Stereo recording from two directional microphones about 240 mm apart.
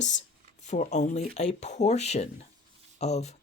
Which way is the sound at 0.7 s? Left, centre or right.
Left.